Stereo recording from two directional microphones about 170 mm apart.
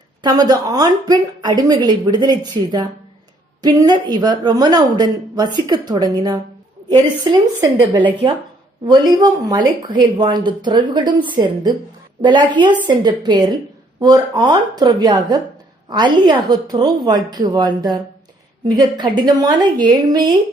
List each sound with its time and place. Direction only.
0.2 s speech: 25° right (ahead or behind)